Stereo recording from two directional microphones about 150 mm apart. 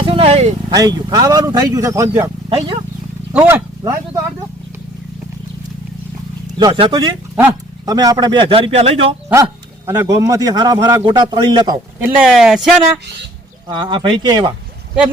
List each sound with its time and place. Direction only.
0.0 s speech: 40° right (ahead or behind)
0.7 s speech: 25° right (ahead or behind)
3.3 s speech: 10° right (ahead or behind)
3.8 s a sound: 20° right (ahead or behind)
6.7 s speech: 30° right (ahead or behind)
9.3 s speech: 20° right (ahead or behind)
12.0 s speech: 5° right (ahead or behind)
13.7 s speech: 30° right (ahead or behind)